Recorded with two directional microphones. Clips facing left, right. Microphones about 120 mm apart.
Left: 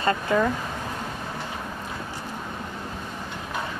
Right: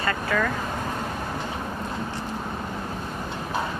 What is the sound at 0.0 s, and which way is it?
Speech, 25° left (ahead or behind).